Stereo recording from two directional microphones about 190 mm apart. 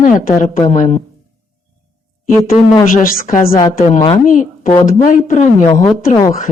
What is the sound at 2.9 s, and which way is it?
Speech, 45° left (ahead or behind).